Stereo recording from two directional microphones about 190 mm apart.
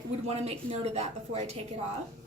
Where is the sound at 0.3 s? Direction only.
30° right (ahead or behind).